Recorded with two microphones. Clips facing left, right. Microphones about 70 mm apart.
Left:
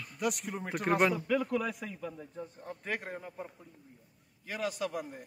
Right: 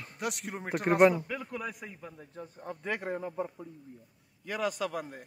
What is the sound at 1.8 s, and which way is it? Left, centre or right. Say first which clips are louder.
Speech: left 4 dB; right.